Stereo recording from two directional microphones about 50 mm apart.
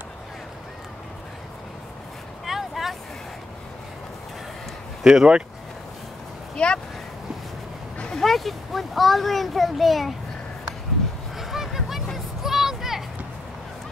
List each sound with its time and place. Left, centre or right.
2.4 s vehicle: centre
5.0 s speech: centre
6.5 s vehicle: centre
8.2 s a child's voice: centre
11.3 s a sound: centre